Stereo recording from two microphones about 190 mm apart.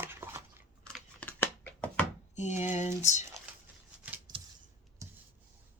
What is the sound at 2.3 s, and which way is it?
Speech, 40° left (ahead or behind).